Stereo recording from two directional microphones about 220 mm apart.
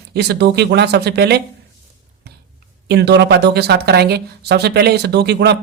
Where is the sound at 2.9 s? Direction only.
50° right (ahead or behind).